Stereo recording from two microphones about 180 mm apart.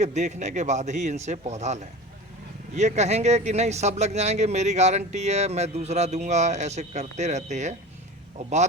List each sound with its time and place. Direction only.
0.0 s speech: 40° right (ahead or behind)